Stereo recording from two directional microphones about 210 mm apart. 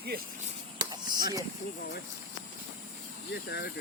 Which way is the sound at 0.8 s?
20° right (ahead or behind).